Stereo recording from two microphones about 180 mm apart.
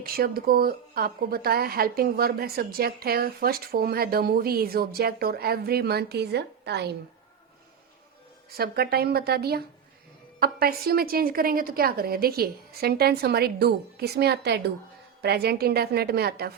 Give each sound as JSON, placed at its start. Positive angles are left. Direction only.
{"t": 0.0, "sound": "a woman's voice", "side_deg": -55}
{"t": 8.5, "sound": "a woman's voice", "side_deg": -60}